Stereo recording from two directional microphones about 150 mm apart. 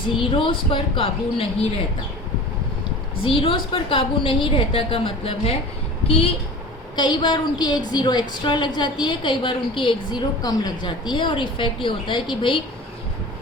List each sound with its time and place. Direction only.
0.2 s a woman's voice: 35° left (ahead or behind)
3.2 s a woman's voice: 35° left (ahead or behind)